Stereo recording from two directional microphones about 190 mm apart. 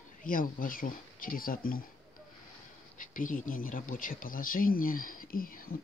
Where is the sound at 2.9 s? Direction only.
45° left (ahead or behind).